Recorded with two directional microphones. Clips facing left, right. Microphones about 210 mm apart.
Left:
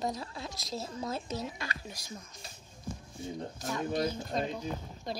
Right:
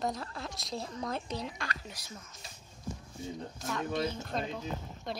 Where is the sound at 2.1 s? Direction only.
35° left (ahead or behind).